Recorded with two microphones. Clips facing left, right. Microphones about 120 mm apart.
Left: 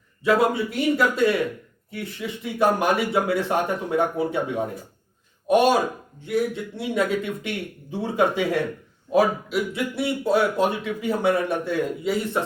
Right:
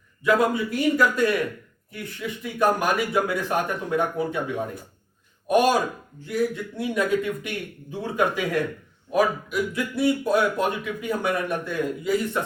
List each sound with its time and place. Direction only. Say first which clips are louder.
0.3 s speech: left 1 dB; 25° left (ahead or behind)
5.5 s speech: left 2 dB; 25° left (ahead or behind)